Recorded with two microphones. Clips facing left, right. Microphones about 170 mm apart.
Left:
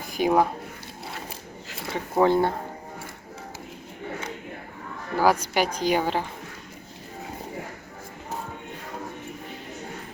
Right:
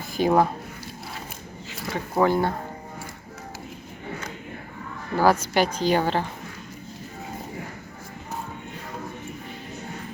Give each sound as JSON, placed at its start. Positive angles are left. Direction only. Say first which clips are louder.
{"t": 0.1, "sound": "speech", "louder": "right 1 dB", "side_deg": 10}
{"t": 1.9, "sound": "speech", "louder": "left 1 dB", "side_deg": 20}
{"t": 5.1, "sound": "a woman's voice", "louder": "right 2 dB", "side_deg": 10}